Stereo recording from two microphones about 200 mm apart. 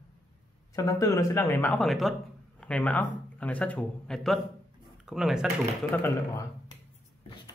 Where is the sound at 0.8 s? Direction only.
15° left (ahead or behind); by 5.5 s centre (ahead or behind).